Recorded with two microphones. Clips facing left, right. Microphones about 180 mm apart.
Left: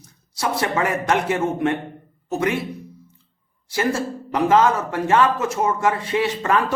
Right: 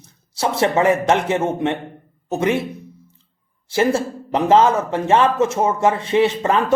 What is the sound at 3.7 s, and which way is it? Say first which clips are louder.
A man's voice: right 4 dB; 25° right (ahead or behind).